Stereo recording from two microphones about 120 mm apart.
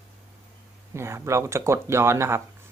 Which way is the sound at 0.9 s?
20° right (ahead or behind).